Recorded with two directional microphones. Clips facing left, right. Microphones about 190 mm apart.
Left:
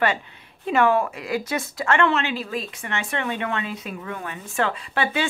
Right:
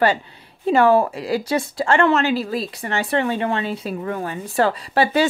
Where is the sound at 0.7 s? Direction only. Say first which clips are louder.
Right 5 dB; 35° right (ahead or behind).